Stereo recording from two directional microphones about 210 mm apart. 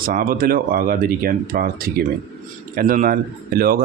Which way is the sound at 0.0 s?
40° right (ahead or behind).